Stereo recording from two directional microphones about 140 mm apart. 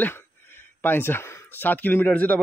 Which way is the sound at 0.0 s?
15° left (ahead or behind).